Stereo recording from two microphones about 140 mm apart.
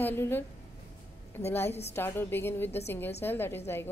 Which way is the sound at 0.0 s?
15° left (ahead or behind).